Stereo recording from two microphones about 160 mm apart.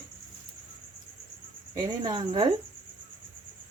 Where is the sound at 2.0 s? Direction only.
30° right (ahead or behind).